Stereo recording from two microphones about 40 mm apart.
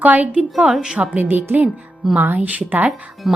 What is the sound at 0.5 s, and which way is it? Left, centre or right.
Speech, centre.